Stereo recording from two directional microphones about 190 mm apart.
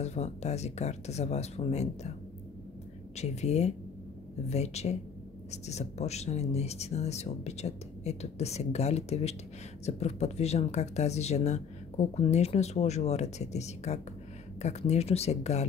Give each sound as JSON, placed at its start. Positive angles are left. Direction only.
{"t": 0.0, "sound": "speech", "side_deg": 35}
{"t": 3.2, "sound": "speech", "side_deg": 35}